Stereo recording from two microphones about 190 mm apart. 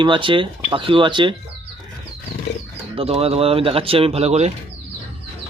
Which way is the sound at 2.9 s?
30° right (ahead or behind).